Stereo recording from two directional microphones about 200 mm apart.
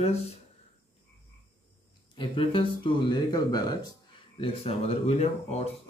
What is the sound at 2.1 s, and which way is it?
Speech, 25° left (ahead or behind).